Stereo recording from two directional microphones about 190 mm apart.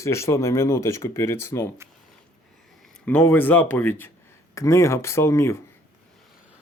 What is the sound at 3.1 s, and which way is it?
Speech, 10° left (ahead or behind).